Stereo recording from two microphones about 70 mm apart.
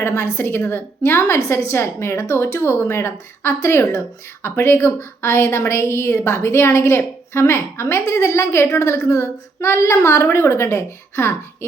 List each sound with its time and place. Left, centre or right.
0.2 s a woman's voice: left